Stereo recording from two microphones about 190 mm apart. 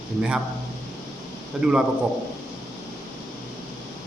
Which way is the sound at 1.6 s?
5° right (ahead or behind).